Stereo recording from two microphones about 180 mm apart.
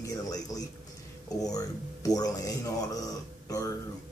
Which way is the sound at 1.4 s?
20° left (ahead or behind).